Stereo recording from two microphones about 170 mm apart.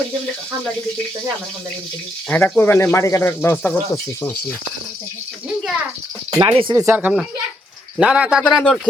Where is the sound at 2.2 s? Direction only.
5° left (ahead or behind).